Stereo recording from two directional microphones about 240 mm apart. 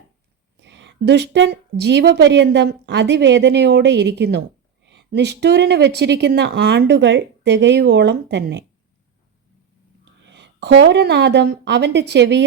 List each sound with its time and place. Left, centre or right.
0.5 s a woman's voice: right
10.2 s a woman's voice: right